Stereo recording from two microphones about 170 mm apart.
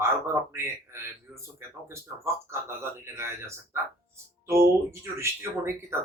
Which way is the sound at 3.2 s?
15° right (ahead or behind).